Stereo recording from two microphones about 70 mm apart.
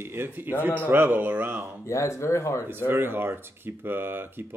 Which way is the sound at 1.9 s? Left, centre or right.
Left.